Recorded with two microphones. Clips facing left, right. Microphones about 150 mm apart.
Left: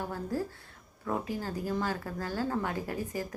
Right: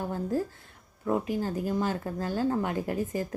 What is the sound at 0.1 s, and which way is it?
Speech, 20° right (ahead or behind).